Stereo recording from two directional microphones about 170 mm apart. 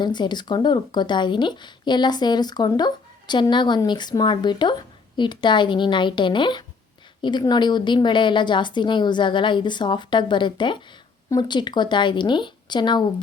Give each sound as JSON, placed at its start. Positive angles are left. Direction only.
{"t": 0.0, "sound": "speech", "side_deg": 25}